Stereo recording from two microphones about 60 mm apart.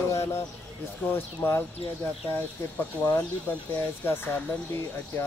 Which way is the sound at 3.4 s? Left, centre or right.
Left.